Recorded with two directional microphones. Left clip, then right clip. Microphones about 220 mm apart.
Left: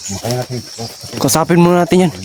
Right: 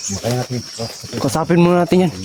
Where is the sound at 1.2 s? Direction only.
20° left (ahead or behind).